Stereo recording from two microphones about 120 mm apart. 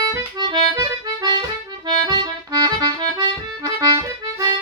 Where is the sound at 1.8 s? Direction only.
35° right (ahead or behind).